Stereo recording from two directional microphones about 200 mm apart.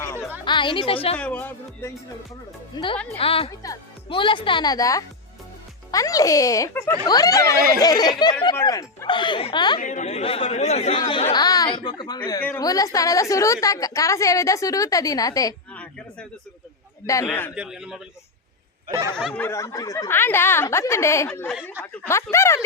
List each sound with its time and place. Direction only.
0.0 s music: 10° left (ahead or behind)
0.4 s a woman's voice: 25° left (ahead or behind)
1.1 s a woman's voice: 5° left (ahead or behind)
2.7 s a woman's voice: 25° left (ahead or behind)
9.8 s a woman's voice: 35° left (ahead or behind); by 15.5 s 15° left (ahead or behind)
15.7 s a sound: 5° left (ahead or behind)
17.1 s a woman's voice: 15° left (ahead or behind)
17.5 s a man's voice: 5° right (ahead or behind)
19.1 s a woman's voice: 5° left (ahead or behind)
21.6 s speech: 10° right (ahead or behind)
21.9 s a woman's voice: 15° left (ahead or behind)